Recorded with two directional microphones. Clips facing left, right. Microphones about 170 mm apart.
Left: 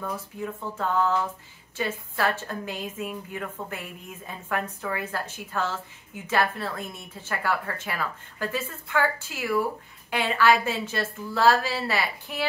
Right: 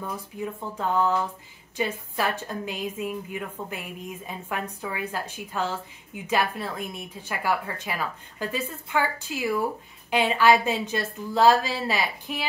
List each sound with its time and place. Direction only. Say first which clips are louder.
0.0 s a woman's voice: even; 15° right (ahead or behind)